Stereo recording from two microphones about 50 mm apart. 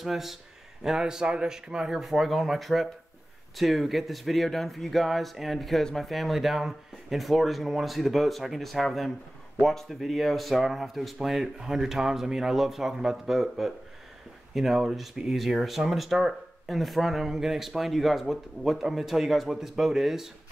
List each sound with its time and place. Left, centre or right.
0.0 s speech: centre